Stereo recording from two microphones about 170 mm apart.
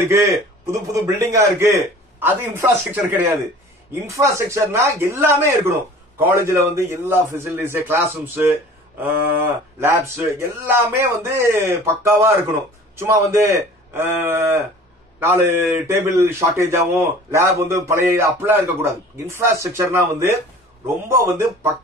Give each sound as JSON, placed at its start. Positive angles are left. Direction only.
{"t": 0.0, "sound": "speech", "side_deg": -15}